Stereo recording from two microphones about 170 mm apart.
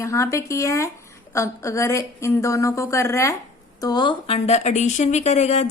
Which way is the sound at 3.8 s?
25° left (ahead or behind).